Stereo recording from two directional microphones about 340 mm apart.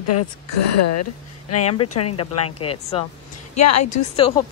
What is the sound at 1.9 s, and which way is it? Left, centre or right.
Speech, left.